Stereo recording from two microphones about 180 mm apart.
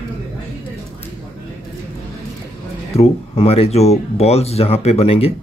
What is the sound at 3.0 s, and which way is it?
Speech, 35° left (ahead or behind).